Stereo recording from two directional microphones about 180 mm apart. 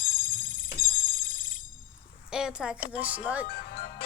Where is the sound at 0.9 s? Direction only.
50° left (ahead or behind).